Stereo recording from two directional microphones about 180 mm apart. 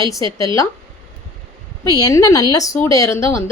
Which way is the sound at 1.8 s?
20° left (ahead or behind).